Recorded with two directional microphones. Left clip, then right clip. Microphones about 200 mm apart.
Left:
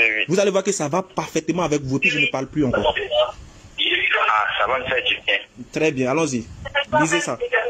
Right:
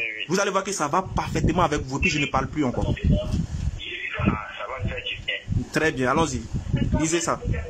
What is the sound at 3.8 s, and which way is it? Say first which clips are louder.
Radio: left 11 dB; 60° left (ahead or behind).